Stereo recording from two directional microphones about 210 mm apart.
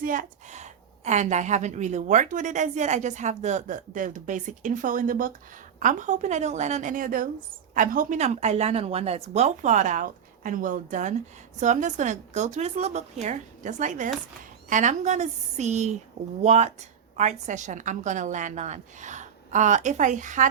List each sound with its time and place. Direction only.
0.0 s a woman's voice: 40° right (ahead or behind)